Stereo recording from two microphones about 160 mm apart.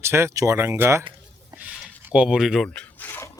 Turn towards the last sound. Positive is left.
turn(degrees=15)  # may be behind; listen again after turning